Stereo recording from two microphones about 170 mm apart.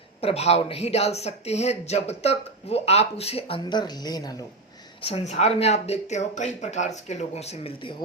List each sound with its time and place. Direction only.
0.2 s speech: 35° left (ahead or behind)
4.9 s speech: 35° left (ahead or behind)